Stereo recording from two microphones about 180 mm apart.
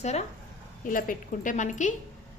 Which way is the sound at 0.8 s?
50° left (ahead or behind).